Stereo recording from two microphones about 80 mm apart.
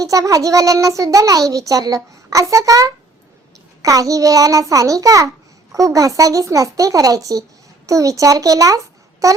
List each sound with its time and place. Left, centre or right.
0.0 s a child's voice: right